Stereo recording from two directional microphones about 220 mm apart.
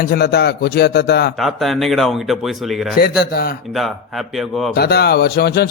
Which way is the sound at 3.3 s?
45° left (ahead or behind).